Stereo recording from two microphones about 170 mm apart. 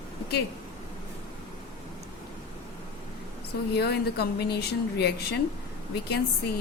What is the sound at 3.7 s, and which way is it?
A woman's voice, 75° left (ahead or behind).